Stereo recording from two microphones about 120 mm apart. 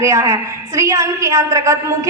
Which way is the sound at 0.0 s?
25° right (ahead or behind).